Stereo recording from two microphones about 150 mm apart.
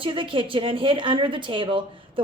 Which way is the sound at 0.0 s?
35° right (ahead or behind).